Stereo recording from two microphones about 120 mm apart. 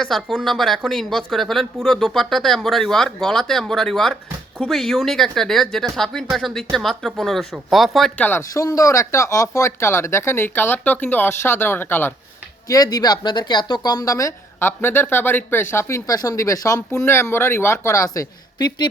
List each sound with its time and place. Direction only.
0.0 s speech: centre (ahead or behind)
8.2 s speech: 20° left (ahead or behind)
12.6 s speech: 30° left (ahead or behind)